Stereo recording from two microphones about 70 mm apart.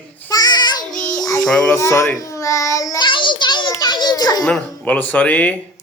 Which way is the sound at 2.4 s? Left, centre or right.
Left.